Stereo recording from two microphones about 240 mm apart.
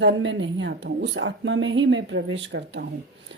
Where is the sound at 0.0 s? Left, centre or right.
Right.